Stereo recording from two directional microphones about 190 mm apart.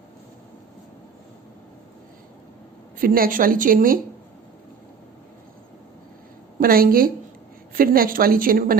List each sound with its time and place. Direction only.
3.0 s a woman's voice: 50° right (ahead or behind)
6.6 s a woman's voice: 50° right (ahead or behind)